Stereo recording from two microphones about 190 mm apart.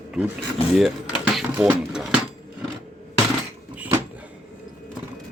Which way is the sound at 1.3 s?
5° right (ahead or behind).